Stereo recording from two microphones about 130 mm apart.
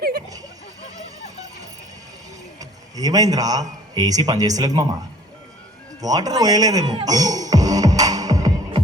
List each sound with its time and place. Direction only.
2.6 s a man's voice: 30° right (ahead or behind)
6.0 s music: 30° right (ahead or behind)